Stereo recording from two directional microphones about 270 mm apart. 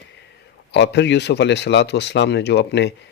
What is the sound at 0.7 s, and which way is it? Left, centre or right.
Speech, left.